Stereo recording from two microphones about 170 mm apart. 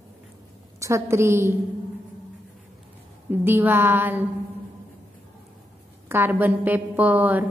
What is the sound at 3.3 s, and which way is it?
Speech, 15° right (ahead or behind).